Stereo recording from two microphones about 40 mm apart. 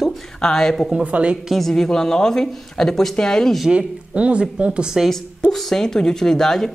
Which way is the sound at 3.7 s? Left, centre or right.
Right.